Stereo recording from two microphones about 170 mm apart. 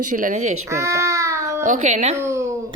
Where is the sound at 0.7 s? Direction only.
15° right (ahead or behind).